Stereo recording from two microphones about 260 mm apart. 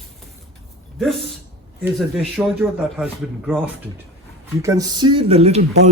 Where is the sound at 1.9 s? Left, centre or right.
Centre.